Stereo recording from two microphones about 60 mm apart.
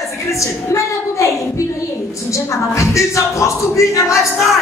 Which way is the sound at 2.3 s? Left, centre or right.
Left.